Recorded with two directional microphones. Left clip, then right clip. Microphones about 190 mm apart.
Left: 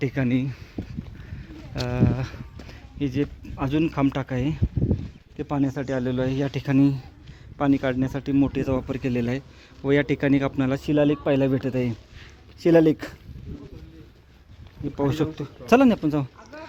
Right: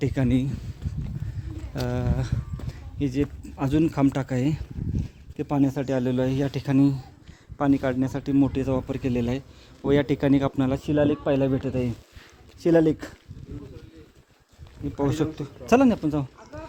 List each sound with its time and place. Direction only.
0.0 s speech: 10° right (ahead or behind)
10.8 s speech: 10° left (ahead or behind)
11.3 s speech: 45° left (ahead or behind)
11.7 s speech: 15° left (ahead or behind)
14.9 s speech: centre (ahead or behind); by 16.2 s 15° left (ahead or behind)
16.5 s a sound: 10° left (ahead or behind)